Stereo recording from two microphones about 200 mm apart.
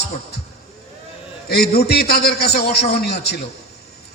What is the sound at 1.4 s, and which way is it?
A man's voice, 55° left (ahead or behind).